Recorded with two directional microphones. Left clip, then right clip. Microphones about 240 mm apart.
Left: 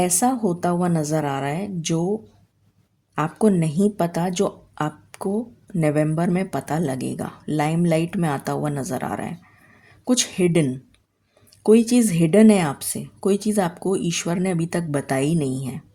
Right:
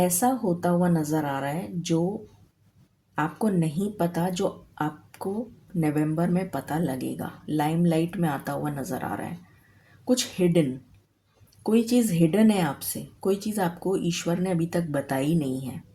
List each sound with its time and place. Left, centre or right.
0.0 s speech: left
3.2 s speech: left